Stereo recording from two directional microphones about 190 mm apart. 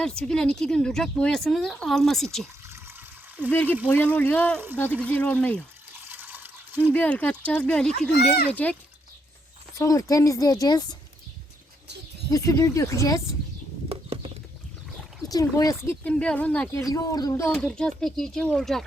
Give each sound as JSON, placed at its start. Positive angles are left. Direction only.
{"t": 0.0, "sound": "speech", "side_deg": 5}
{"t": 2.6, "sound": "water", "side_deg": -15}
{"t": 3.5, "sound": "speech", "side_deg": 10}
{"t": 6.1, "sound": "water", "side_deg": -10}
{"t": 6.9, "sound": "speech", "side_deg": 10}
{"t": 9.7, "sound": "speech", "side_deg": 15}
{"t": 12.3, "sound": "speech", "side_deg": 15}
{"t": 13.8, "sound": "a sound", "side_deg": -30}
{"t": 15.3, "sound": "speech", "side_deg": 20}
{"t": 16.9, "sound": "speech", "side_deg": 20}
{"t": 17.5, "sound": "speech", "side_deg": 5}